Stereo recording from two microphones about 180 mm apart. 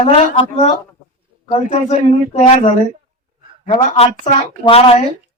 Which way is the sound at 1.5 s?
35° left (ahead or behind).